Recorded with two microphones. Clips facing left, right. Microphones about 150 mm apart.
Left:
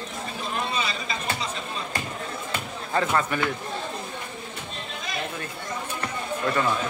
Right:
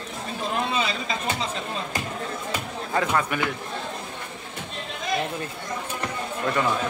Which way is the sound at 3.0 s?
5° right (ahead or behind).